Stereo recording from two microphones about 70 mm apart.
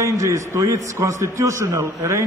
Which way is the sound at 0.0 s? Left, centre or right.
Right.